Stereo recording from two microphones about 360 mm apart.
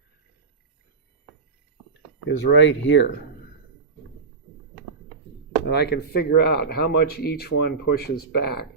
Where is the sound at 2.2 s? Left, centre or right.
Left.